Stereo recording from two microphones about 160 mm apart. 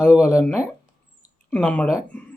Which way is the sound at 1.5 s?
5° left (ahead or behind).